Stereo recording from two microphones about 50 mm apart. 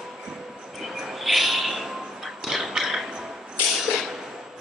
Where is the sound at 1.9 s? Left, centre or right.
Centre.